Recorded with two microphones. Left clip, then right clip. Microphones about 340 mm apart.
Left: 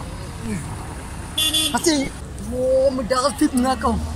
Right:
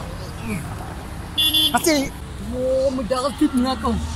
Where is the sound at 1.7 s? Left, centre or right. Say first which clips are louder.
Right 1 dB; centre.